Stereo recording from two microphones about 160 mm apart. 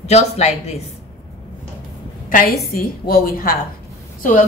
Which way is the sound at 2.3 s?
65° left (ahead or behind).